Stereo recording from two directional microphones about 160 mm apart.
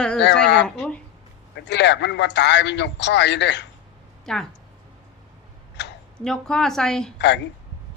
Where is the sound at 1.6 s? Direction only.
90° left.